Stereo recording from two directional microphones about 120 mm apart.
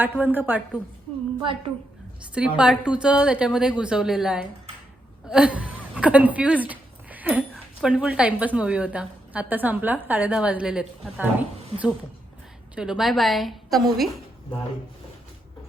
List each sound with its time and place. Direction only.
0.2 s a woman's voice: 15° right (ahead or behind)
1.4 s a woman's voice: 45° right (ahead or behind)
2.6 s a woman's voice: 10° right (ahead or behind)